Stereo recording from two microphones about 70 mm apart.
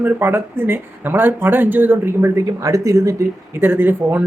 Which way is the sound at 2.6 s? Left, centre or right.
Right.